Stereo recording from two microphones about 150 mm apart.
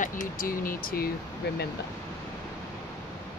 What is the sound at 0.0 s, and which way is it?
Speech, 65° left (ahead or behind).